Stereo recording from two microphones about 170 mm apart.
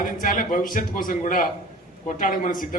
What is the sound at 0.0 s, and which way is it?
A man's voice, 50° left (ahead or behind).